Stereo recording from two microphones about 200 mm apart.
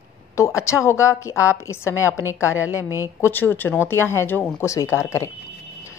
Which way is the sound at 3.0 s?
15° left (ahead or behind).